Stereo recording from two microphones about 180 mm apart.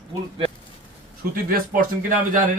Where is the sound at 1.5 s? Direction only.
50° right (ahead or behind).